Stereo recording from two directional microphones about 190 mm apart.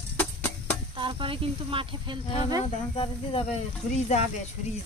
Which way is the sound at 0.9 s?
25° right (ahead or behind).